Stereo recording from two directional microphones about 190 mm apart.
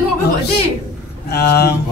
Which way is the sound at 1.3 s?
55° left (ahead or behind).